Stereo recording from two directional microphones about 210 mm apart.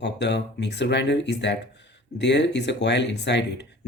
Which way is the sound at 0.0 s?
55° left (ahead or behind).